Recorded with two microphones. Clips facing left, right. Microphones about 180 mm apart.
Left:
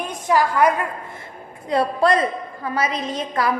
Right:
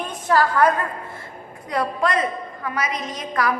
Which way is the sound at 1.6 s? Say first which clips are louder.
Left 5 dB; 30° left (ahead or behind).